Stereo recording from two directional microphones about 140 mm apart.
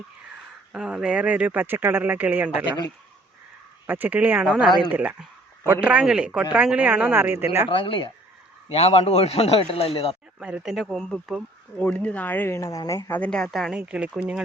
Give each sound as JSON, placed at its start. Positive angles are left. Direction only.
{"t": 0.7, "sound": "speech", "side_deg": -5}
{"t": 3.8, "sound": "speech", "side_deg": -15}
{"t": 7.7, "sound": "a man's voice", "side_deg": 40}
{"t": 10.4, "sound": "speech", "side_deg": -5}
{"t": 13.1, "sound": "speech", "side_deg": 10}